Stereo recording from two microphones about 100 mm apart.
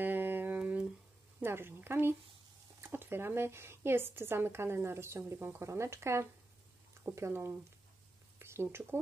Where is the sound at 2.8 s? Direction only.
25° right (ahead or behind).